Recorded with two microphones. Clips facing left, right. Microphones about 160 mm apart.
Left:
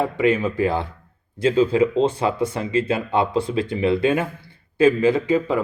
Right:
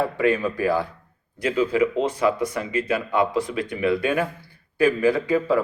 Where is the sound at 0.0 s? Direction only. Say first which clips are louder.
Left 2 dB; 20° left (ahead or behind).